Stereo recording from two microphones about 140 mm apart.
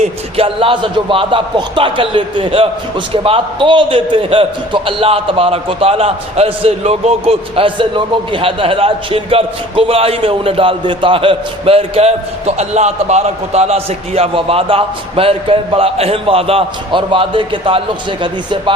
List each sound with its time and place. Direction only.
0.0 s a man's voice: 40° right (ahead or behind)